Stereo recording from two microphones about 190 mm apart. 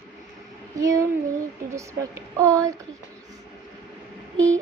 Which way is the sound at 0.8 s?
15° right (ahead or behind).